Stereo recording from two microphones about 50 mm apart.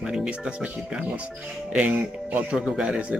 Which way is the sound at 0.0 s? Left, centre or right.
Centre.